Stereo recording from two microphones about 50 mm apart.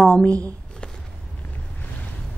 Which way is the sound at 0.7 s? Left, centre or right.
Centre.